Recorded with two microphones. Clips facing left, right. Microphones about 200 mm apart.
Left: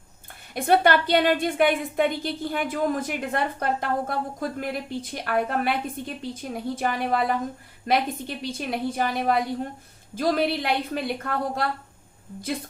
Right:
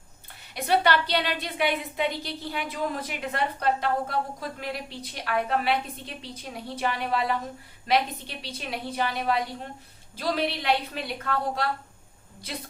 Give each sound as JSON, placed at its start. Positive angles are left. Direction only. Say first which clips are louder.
{"t": 0.5, "sound": "a woman's voice", "louder": "left 4 dB", "side_deg": 50}
{"t": 8.4, "sound": "a woman's voice", "louder": "left 5 dB", "side_deg": 50}